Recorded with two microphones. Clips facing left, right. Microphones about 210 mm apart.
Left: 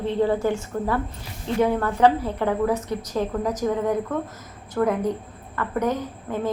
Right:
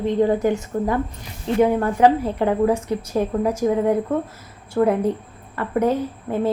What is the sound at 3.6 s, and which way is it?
A woman's voice, 30° right (ahead or behind).